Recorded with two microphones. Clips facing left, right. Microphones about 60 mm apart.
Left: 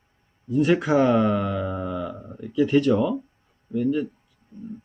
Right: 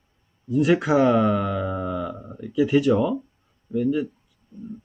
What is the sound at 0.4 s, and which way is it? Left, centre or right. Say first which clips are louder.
Speech: right 1 dB; centre.